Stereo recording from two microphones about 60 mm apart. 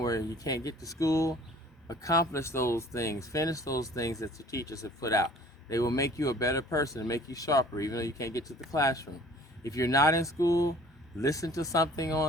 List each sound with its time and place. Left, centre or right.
0.0 s speech: left